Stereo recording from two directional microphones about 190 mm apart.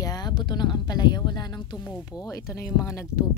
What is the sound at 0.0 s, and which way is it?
Speech, 20° left (ahead or behind).